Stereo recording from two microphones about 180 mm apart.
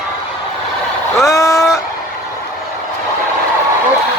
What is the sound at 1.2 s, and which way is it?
Vehicle, 15° left (ahead or behind).